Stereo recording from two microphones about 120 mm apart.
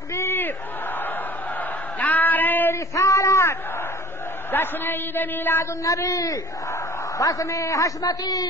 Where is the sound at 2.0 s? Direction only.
15° left (ahead or behind).